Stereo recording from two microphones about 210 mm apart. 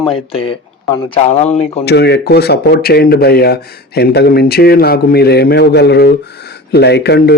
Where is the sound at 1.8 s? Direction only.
50° left (ahead or behind).